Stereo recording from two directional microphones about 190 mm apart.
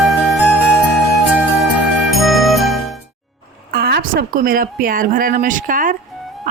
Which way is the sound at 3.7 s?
55° right (ahead or behind).